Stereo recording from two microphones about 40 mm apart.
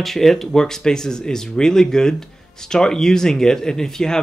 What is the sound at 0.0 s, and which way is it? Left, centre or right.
Speech, centre.